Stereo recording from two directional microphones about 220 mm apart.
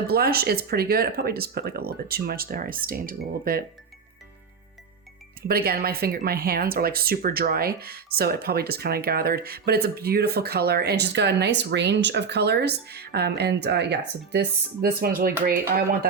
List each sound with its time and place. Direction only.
0.1 s speech: 45° right (ahead or behind)
5.5 s speech: 45° right (ahead or behind)